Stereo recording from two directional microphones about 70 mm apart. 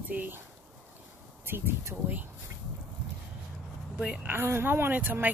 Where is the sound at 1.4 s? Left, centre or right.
Right.